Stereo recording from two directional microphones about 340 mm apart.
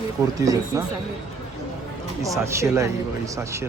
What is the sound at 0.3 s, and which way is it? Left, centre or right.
Speech, centre.